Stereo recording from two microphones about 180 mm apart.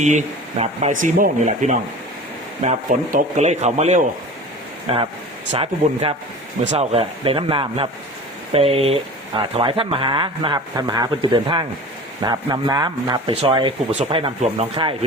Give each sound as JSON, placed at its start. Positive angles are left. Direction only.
{"t": 0.0, "sound": "speech", "side_deg": -40}